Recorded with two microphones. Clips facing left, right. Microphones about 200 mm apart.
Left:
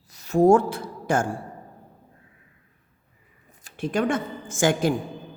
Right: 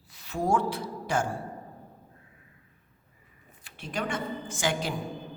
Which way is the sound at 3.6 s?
50° left (ahead or behind).